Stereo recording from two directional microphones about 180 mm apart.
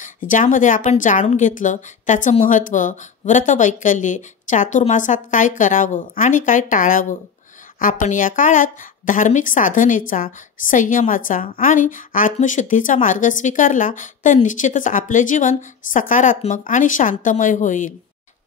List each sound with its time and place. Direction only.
0.0 s a woman's voice: 45° left (ahead or behind)